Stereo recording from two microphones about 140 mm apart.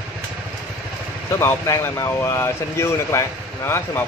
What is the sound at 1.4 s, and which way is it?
Speech, 15° left (ahead or behind).